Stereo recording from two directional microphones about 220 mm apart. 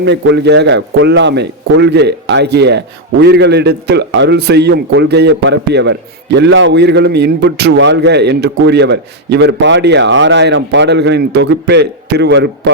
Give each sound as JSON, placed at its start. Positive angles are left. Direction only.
{"t": 0.0, "sound": "a man's voice", "side_deg": -50}